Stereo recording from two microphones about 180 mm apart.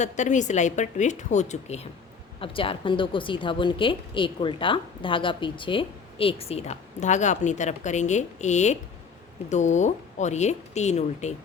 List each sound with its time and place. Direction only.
0.0 s a woman's voice: 40° left (ahead or behind)